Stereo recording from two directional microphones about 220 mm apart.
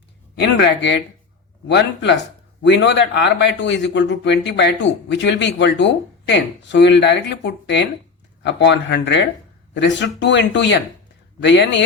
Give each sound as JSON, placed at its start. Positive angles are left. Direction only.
{"t": 0.3, "sound": "speech", "side_deg": 55}